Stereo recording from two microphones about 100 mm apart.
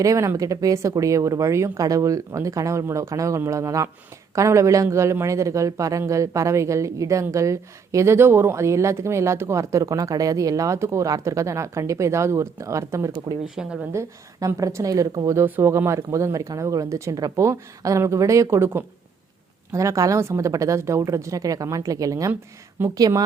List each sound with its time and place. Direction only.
0.0 s speech: 30° right (ahead or behind)
13.6 s speech: 5° right (ahead or behind)
13.9 s speech: 30° right (ahead or behind)
15.3 s speech: 25° right (ahead or behind); by 23.2 s 40° right (ahead or behind)